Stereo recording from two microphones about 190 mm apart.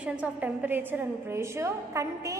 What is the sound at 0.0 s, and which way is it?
A woman's voice, 10° right (ahead or behind).